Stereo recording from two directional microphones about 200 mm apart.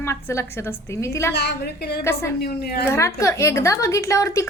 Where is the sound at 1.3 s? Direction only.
55° left (ahead or behind).